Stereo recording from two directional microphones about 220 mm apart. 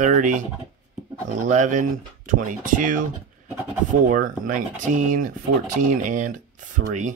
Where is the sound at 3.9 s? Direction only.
35° right (ahead or behind).